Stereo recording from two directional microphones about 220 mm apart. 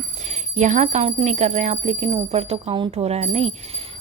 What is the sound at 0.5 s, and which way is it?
A woman's voice, 35° right (ahead or behind).